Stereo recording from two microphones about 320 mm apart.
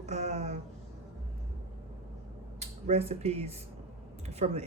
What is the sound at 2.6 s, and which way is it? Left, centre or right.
Speech, centre.